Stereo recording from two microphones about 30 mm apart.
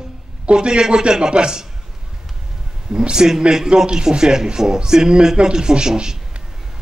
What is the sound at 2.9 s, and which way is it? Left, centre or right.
Speech, right.